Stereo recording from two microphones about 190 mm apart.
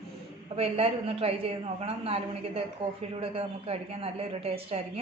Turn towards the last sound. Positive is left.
turn(degrees=-30)  # may be behind; listen again after turning